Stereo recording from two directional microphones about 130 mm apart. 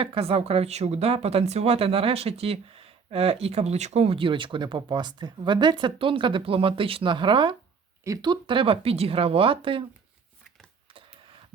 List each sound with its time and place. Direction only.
0.0 s speech: 45° right (ahead or behind)
8.0 s speech: 30° right (ahead or behind)